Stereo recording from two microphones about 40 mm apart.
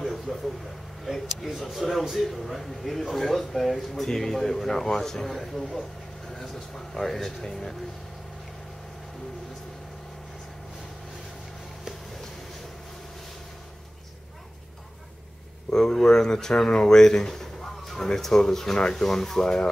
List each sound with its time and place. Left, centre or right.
0.0 s a sound: centre
1.0 s a man's voice: centre
15.7 s speech: centre
17.3 s speech: centre